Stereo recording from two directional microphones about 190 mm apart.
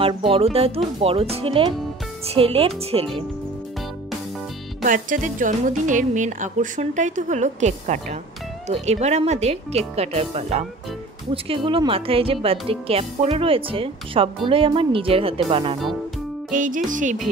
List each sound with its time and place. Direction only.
0.0 s speech: 30° right (ahead or behind)
4.8 s speech: 45° right (ahead or behind)
16.5 s music: 45° right (ahead or behind)